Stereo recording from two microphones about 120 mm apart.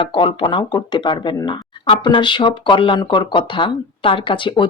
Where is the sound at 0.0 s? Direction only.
45° left (ahead or behind).